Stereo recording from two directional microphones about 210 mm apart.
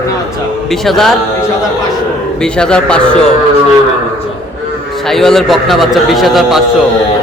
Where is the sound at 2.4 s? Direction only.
5° left (ahead or behind).